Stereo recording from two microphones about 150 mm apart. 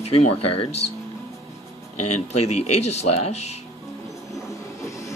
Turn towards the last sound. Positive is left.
turn(degrees=20)  # may be behind; listen again after turning